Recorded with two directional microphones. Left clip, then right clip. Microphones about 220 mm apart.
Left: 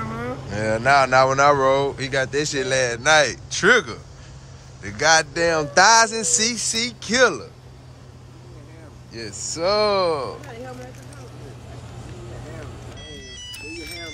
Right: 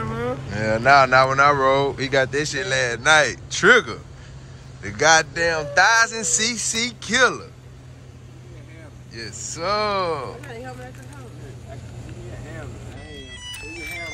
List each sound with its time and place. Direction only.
0.0 s a sound: centre (ahead or behind)
0.5 s speech: 10° left (ahead or behind)
5.3 s music: 30° left (ahead or behind)
6.0 s speech: 15° left (ahead or behind)
9.1 s speech: 15° left (ahead or behind)